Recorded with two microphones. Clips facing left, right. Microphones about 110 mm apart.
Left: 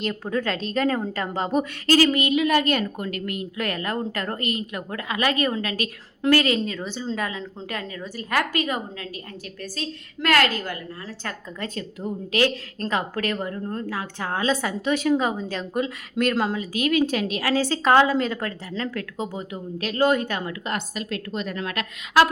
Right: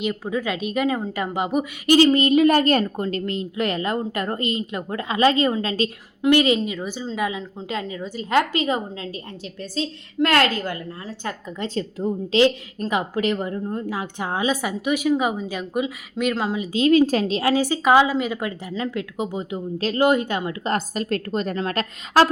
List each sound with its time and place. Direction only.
0.0 s a woman's voice: 5° right (ahead or behind)
2.0 s a woman's voice: 30° right (ahead or behind)
12.8 s a woman's voice: 15° right (ahead or behind)
16.6 s a woman's voice: 25° right (ahead or behind)
17.5 s a woman's voice: 15° right (ahead or behind)
20.7 s a woman's voice: 40° right (ahead or behind)